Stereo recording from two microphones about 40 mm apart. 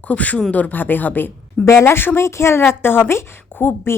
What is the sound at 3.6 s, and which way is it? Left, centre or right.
Speech, left.